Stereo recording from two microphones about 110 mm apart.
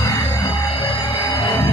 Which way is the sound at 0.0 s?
35° left (ahead or behind).